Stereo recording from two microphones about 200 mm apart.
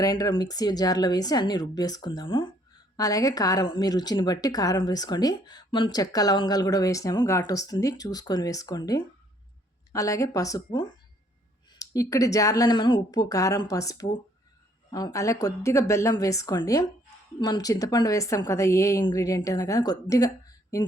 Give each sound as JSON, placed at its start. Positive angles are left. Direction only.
{"t": 0.0, "sound": "a woman's voice", "side_deg": 20}